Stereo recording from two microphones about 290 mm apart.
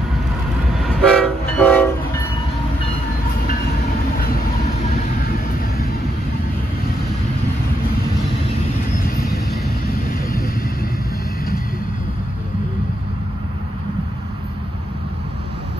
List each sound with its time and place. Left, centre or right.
0.7 s train: centre
10.0 s vehicle: left